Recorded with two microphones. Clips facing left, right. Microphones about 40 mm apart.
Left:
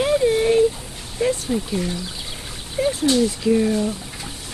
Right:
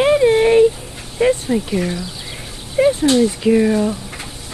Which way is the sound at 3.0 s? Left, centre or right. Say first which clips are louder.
Right 4 dB; right.